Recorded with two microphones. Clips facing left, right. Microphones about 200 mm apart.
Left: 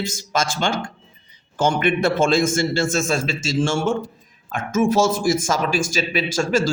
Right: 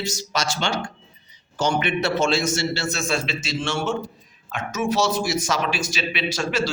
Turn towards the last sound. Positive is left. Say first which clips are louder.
# left 4 dB
turn(degrees=45)  # may be behind; listen again after turning